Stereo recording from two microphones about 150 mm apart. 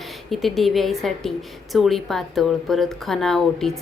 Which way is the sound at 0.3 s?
Centre (ahead or behind).